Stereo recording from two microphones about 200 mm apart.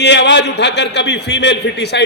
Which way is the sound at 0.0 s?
60° left (ahead or behind).